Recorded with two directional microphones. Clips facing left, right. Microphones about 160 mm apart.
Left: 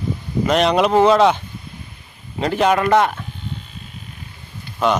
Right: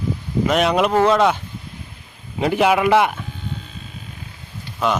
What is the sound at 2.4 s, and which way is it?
Speech, 10° right (ahead or behind).